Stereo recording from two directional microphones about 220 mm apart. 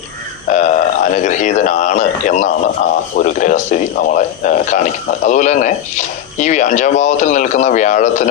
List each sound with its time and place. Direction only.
0.5 s speech: 35° left (ahead or behind)